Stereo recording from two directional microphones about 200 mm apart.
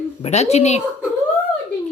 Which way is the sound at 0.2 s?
35° left (ahead or behind).